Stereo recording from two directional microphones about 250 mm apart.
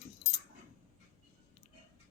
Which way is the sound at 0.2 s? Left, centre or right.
Left.